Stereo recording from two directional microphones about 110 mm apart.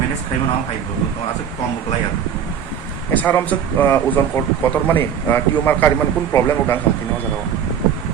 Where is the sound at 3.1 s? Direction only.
15° left (ahead or behind).